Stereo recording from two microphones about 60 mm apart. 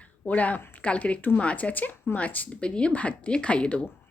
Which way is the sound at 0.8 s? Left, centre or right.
Centre.